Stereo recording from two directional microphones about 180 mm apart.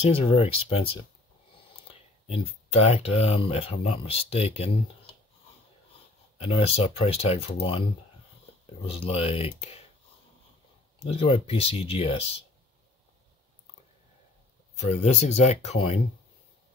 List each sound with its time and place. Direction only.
0.0 s speech: 30° left (ahead or behind)
1.9 s speech: 35° left (ahead or behind)
6.3 s speech: 35° left (ahead or behind)
8.8 s speech: 35° left (ahead or behind)
11.1 s speech: 35° left (ahead or behind)
14.8 s speech: 40° left (ahead or behind)